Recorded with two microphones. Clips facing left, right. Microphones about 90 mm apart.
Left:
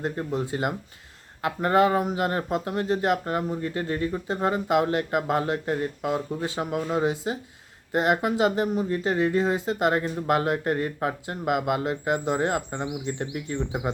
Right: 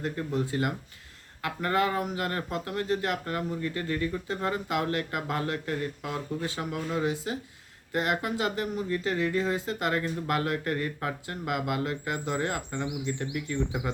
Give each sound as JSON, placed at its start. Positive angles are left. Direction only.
{"t": 0.0, "sound": "speech", "side_deg": 25}